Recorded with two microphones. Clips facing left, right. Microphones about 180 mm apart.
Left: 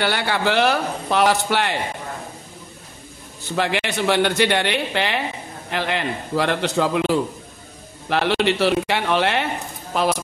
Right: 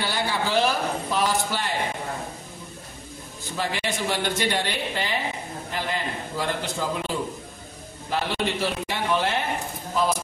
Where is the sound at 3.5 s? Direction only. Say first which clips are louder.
Left 6 dB; 75° left (ahead or behind).